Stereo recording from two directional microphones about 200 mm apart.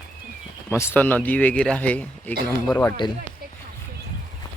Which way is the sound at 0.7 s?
10° left (ahead or behind).